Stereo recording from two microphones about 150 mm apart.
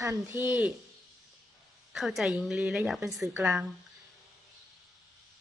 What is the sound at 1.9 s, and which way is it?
A woman's voice, centre (ahead or behind).